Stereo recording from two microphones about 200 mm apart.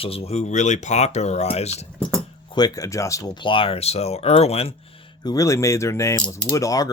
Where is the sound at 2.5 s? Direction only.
20° left (ahead or behind).